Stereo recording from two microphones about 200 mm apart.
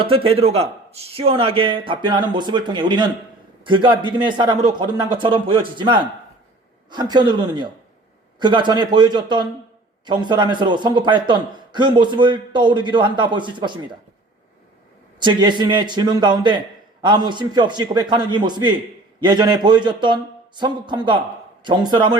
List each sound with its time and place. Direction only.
0.0 s a man's voice: 25° right (ahead or behind)
15.2 s a man's voice: 20° right (ahead or behind)